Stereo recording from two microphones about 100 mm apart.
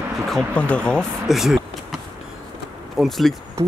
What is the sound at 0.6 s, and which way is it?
Speech, 10° left (ahead or behind).